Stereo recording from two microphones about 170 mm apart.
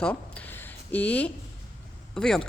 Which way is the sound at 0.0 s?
10° left (ahead or behind).